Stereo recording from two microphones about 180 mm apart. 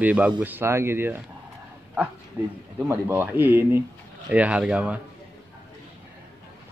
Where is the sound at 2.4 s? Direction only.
10° right (ahead or behind).